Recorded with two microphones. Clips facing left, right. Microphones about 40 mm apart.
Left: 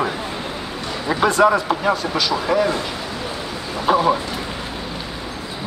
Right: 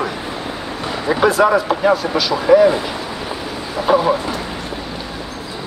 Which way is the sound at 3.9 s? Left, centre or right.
Centre.